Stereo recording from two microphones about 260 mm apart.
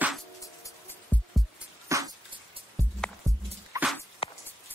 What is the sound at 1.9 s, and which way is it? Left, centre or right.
Dog, centre.